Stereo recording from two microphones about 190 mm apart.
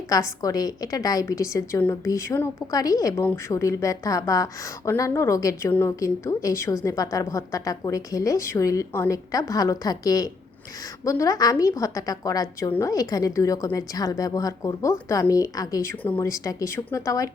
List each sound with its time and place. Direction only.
0.1 s a woman's voice: 20° left (ahead or behind)